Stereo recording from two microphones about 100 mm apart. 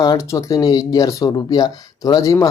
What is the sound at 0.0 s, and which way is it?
Speech, 40° left (ahead or behind).